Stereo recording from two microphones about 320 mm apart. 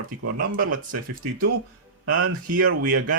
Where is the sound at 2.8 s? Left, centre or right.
Right.